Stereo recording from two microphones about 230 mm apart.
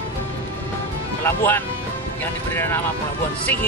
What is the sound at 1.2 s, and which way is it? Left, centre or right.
Speech, centre.